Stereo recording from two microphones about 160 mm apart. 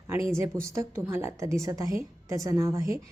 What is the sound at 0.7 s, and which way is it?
A woman's voice, 15° right (ahead or behind).